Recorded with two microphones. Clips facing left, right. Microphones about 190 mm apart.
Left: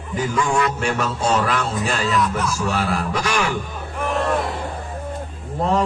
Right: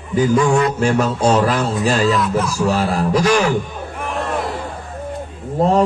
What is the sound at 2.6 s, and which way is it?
Speech, 35° right (ahead or behind).